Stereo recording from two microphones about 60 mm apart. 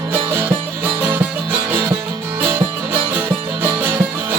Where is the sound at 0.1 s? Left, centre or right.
Right.